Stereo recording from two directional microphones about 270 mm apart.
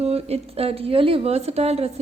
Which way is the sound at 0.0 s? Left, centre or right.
Right.